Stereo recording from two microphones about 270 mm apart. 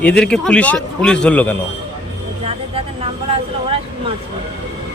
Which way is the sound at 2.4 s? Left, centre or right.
Right.